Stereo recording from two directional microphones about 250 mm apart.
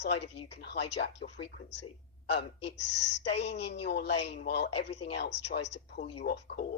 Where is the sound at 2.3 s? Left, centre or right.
Left.